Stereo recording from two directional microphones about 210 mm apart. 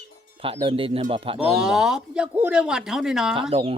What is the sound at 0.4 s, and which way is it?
Speech, 25° right (ahead or behind).